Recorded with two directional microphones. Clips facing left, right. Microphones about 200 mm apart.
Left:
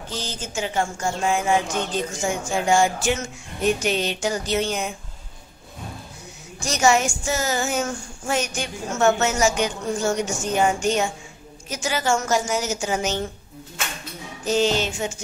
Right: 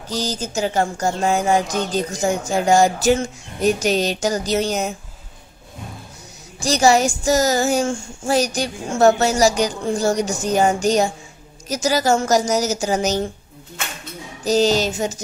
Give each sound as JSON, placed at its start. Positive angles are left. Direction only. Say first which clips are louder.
{"t": 0.1, "sound": "speech", "louder": "right 7 dB", "side_deg": -40}
{"t": 6.6, "sound": "speech", "louder": "right 4 dB", "side_deg": -35}
{"t": 14.4, "sound": "speech", "louder": "right 4 dB", "side_deg": -40}